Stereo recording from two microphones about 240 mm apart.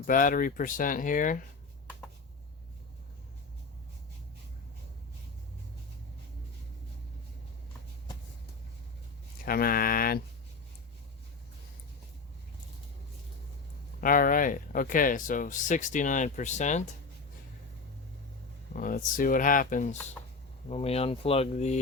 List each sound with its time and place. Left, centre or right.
0.0 s speech: left
9.5 s speech: left
14.0 s speech: left
18.7 s speech: left